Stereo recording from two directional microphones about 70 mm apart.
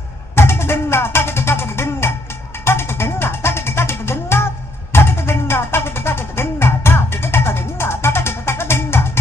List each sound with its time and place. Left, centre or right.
0.4 s music: left